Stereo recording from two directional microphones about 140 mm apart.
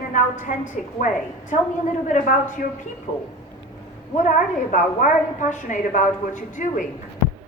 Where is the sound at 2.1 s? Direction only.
65° left (ahead or behind).